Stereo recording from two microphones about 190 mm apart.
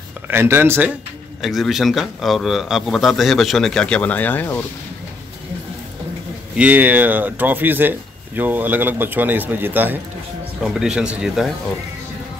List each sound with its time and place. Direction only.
0.3 s a man's voice: 10° right (ahead or behind); by 4.6 s 10° left (ahead or behind)
6.5 s a man's voice: 10° right (ahead or behind)